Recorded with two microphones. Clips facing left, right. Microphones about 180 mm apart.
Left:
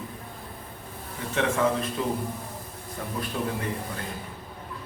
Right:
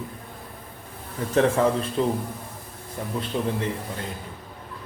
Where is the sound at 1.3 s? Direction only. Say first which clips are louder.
Right 4 dB; 35° right (ahead or behind).